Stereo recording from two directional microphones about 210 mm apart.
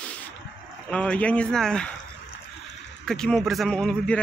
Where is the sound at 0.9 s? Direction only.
5° left (ahead or behind).